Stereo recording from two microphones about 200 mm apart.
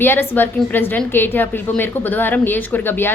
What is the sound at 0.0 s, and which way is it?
A woman's voice, 10° left (ahead or behind).